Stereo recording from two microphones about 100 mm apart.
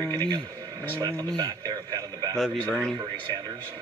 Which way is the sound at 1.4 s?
40° right (ahead or behind).